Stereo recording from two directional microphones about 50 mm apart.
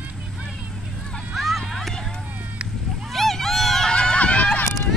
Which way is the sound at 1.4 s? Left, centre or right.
Centre.